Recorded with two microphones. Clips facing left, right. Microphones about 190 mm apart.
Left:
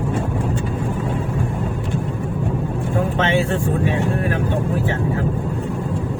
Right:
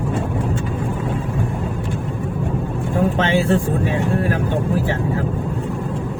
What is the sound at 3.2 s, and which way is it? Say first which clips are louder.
Vehicle: right 1 dB; 35° right (ahead or behind).